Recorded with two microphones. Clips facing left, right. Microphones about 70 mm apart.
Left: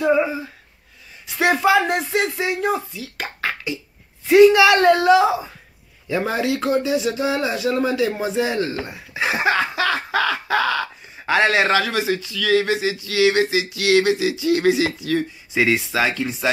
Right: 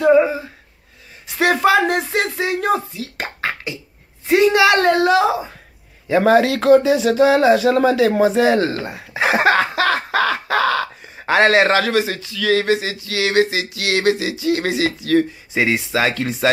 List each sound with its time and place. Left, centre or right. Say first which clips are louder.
0.1 s a sound: right 6 dB; centre
1.4 s speech: right 2 dB; right
3.2 s beatboxing: right 1 dB; right
4.5 s speech: even; right
6.1 s speech: right 8 dB; right
8.8 s speech: right 5 dB; right
9.2 s a sound: right 4 dB; right
15.5 s speech: right 1 dB; right
16.1 s speech: right 4 dB; right